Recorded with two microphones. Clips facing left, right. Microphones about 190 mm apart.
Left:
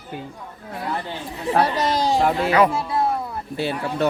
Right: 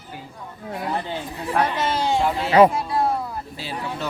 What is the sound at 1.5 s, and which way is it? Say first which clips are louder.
Speech: left 2 dB; 40° left (ahead or behind).